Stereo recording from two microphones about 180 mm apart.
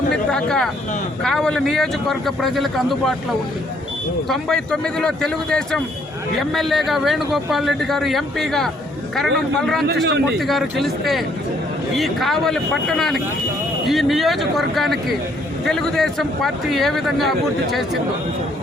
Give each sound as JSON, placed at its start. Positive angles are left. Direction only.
{"t": 0.3, "sound": "a man's voice", "side_deg": 5}
{"t": 4.3, "sound": "a man's voice", "side_deg": 5}
{"t": 9.8, "sound": "a man's voice", "side_deg": -70}
{"t": 10.4, "sound": "a man's voice", "side_deg": 0}